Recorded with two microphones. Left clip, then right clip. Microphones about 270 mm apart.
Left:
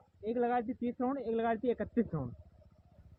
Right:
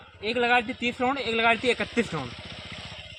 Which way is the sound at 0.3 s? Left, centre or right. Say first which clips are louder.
Right 9 dB; centre.